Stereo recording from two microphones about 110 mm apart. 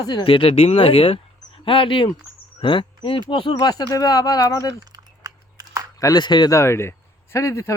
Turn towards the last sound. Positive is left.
turn(degrees=25)  # may be behind; listen again after turning